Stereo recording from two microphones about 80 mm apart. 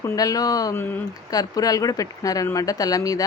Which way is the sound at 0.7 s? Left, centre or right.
Left.